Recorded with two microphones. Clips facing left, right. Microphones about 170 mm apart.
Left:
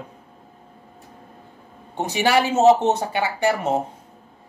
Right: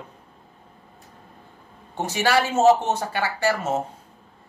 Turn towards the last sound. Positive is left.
turn(degrees=20)  # may be behind; listen again after turning